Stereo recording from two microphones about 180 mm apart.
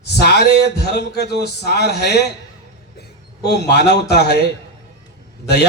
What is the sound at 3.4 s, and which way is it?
Speech, 65° left (ahead or behind).